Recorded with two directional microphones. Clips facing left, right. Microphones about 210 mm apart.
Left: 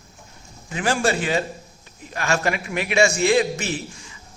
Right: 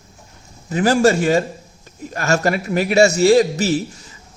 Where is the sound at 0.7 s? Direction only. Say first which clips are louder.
Right 7 dB; 40° right (ahead or behind).